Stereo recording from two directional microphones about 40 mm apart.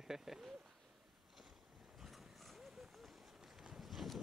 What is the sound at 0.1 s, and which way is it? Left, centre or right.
Speech, centre.